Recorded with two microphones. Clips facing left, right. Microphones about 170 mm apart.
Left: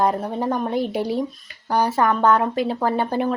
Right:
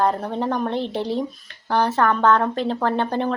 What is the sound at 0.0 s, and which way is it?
Speech, 10° left (ahead or behind).